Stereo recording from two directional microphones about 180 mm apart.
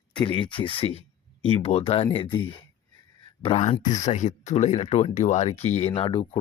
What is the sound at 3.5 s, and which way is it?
Speech, 35° left (ahead or behind).